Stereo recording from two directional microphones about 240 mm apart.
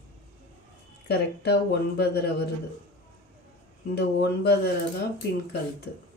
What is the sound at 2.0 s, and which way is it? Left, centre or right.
Speech, left.